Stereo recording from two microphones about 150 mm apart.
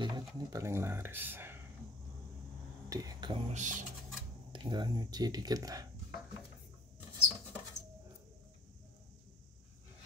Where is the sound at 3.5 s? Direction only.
55° right (ahead or behind).